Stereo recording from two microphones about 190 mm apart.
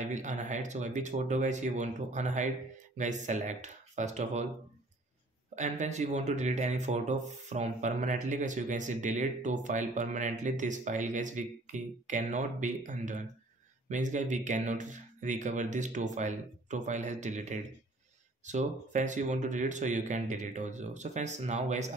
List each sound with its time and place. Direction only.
0.0 s speech: 40° right (ahead or behind)
5.6 s speech: 40° right (ahead or behind)